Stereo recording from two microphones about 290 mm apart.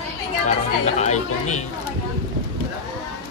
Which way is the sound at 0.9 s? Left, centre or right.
Left.